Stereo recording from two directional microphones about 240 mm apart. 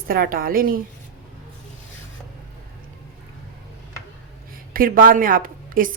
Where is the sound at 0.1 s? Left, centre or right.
Right.